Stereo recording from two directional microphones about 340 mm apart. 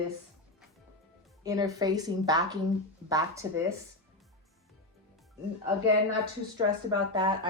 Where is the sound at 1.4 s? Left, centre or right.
Centre.